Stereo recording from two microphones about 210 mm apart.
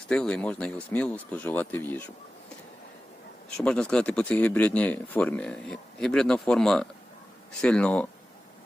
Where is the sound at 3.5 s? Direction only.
5° left (ahead or behind).